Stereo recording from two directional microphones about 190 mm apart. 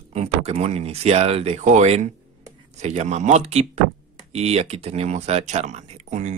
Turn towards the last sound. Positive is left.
turn(degrees=-35)  # may be behind; listen again after turning